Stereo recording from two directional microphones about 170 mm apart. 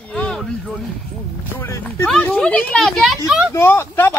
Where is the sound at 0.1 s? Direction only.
5° left (ahead or behind).